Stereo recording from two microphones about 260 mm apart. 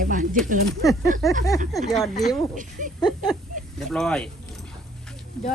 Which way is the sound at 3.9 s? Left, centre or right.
Centre.